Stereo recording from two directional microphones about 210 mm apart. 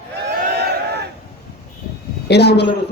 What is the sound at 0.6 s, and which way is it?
Crowd, 50° right (ahead or behind).